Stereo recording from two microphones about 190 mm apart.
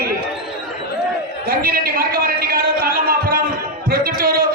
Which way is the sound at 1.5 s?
50° right (ahead or behind).